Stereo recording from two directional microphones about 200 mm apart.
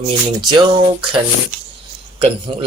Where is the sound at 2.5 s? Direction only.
25° right (ahead or behind).